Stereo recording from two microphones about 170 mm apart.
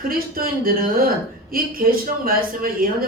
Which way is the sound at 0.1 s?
60° right (ahead or behind).